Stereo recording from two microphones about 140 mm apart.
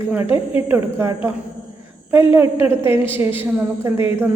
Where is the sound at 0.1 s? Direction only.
15° right (ahead or behind).